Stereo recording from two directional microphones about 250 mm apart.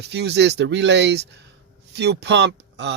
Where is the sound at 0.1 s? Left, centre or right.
Right.